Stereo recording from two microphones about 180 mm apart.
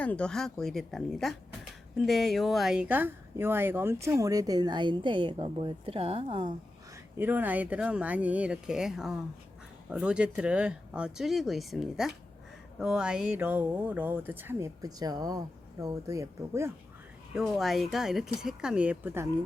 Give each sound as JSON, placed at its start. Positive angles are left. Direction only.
{"t": 0.0, "sound": "speech", "side_deg": 5}
{"t": 7.2, "sound": "speech", "side_deg": -10}
{"t": 17.3, "sound": "speech", "side_deg": 0}